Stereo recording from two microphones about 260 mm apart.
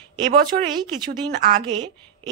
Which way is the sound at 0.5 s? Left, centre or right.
Right.